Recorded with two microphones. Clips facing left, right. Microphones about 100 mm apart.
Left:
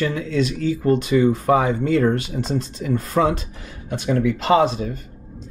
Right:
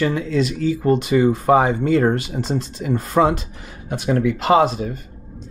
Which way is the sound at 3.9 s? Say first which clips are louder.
Right 1 dB; 50° right (ahead or behind).